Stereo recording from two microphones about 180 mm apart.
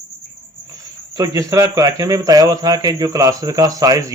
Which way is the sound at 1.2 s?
20° right (ahead or behind).